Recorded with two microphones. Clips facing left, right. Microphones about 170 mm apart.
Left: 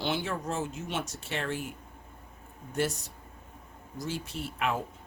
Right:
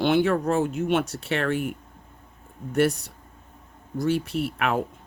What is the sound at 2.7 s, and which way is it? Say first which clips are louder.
Speech: right 9 dB; 65° right (ahead or behind).